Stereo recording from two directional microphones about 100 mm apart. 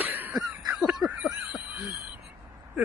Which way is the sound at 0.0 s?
20° right (ahead or behind).